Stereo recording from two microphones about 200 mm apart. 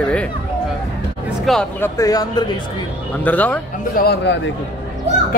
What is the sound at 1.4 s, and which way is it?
Speech, centre (ahead or behind).